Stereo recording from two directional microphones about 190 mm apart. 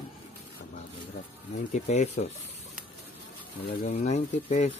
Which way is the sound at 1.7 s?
35° left (ahead or behind).